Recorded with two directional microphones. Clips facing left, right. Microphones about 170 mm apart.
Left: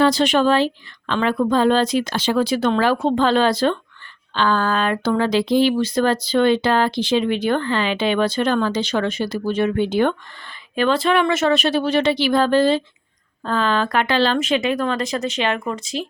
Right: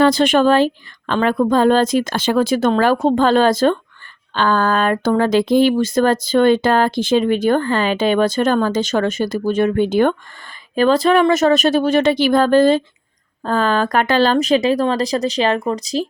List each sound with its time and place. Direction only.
0.0 s speech: 50° right (ahead or behind)